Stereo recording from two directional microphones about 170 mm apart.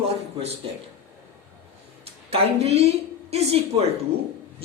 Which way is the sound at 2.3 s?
40° right (ahead or behind).